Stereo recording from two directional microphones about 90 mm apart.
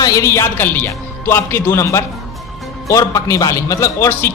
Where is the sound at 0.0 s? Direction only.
35° left (ahead or behind).